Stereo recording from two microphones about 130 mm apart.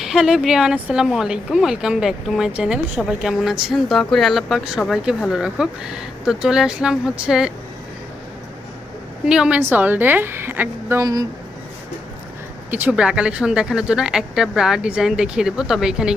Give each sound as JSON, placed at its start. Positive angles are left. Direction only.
{"t": 0.0, "sound": "speech", "side_deg": -5}
{"t": 9.2, "sound": "speech", "side_deg": -5}
{"t": 9.6, "sound": "a woman's voice", "side_deg": -15}
{"t": 12.7, "sound": "speech", "side_deg": -10}